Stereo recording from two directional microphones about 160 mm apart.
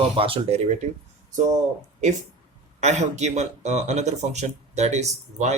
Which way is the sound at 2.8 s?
45° right (ahead or behind).